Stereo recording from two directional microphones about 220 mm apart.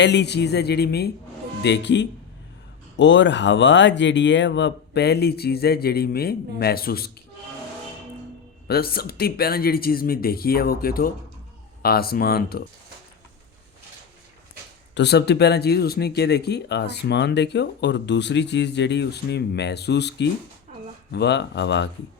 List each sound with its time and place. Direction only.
0.0 s speech: 50° left (ahead or behind)
8.6 s speech: 45° left (ahead or behind)
14.9 s speech: 50° left (ahead or behind)